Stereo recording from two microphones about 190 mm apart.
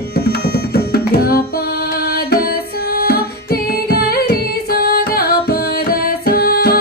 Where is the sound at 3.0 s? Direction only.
50° left (ahead or behind).